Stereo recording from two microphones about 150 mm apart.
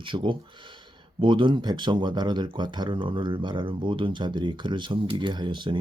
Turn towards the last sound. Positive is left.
turn(degrees=-35)  # may be behind; listen again after turning